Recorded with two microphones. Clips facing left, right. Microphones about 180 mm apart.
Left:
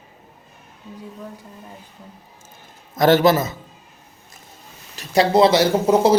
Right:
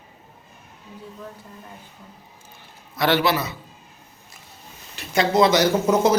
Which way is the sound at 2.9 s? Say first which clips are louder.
Left 6 dB; 45° left (ahead or behind).